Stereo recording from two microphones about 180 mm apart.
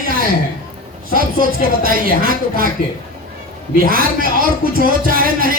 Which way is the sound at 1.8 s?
55° right (ahead or behind).